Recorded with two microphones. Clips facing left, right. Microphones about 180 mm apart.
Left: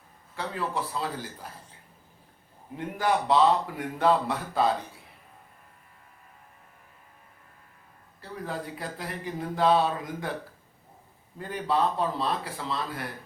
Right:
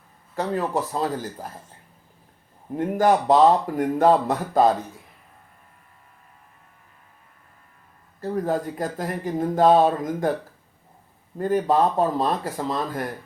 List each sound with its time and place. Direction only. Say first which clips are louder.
0.3 s speech: right 7 dB; 45° right (ahead or behind)
2.7 s speech: right 8 dB; 45° right (ahead or behind)
8.2 s speech: right 11 dB; 45° right (ahead or behind)
11.3 s speech: right 7 dB; 45° right (ahead or behind)